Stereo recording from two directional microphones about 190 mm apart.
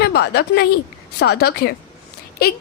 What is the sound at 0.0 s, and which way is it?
A woman's voice, 60° left (ahead or behind).